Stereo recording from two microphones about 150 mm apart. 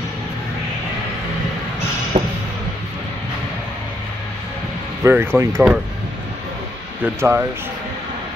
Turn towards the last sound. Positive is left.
turn(degrees=-15)  # may be behind; listen again after turning